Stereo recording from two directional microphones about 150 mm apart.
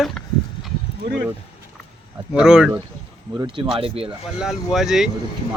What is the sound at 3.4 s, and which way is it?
Speech, 30° right (ahead or behind).